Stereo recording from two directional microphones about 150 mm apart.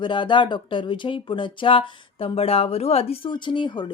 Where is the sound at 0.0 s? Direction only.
30° left (ahead or behind).